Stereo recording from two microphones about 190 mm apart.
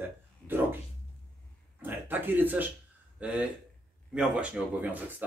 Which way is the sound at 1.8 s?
10° right (ahead or behind).